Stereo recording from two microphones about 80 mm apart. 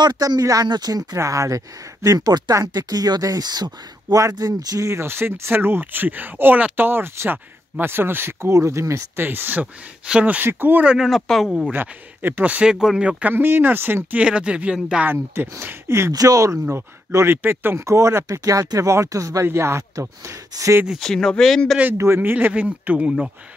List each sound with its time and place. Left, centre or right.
0.0 s speech: right
0.4 s speech: right
0.7 s speech: right
1.1 s speech: right
10.9 s speech: centre
11.7 s speech: right; by 13.2 s centre
13.2 s speech: right
14.1 s speech: centre
15.1 s speech: right
16.1 s speech: right
17.3 s speech: right
21.0 s speech: centre
21.9 s speech: right; by 23.1 s centre